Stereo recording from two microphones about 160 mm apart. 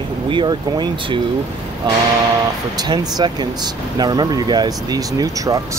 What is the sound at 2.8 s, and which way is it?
Speech, 25° right (ahead or behind).